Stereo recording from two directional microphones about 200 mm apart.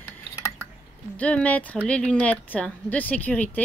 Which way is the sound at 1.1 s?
5° left (ahead or behind).